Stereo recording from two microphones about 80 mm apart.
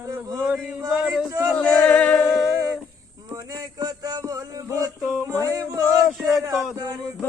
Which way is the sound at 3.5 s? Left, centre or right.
Right.